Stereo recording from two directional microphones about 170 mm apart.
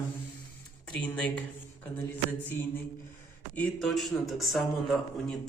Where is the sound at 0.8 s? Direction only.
5° left (ahead or behind).